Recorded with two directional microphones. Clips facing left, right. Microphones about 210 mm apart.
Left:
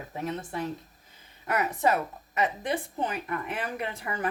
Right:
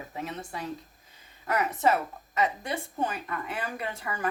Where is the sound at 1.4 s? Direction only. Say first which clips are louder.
Even; 20° left (ahead or behind).